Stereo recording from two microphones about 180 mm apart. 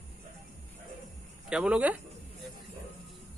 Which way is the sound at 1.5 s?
5° right (ahead or behind).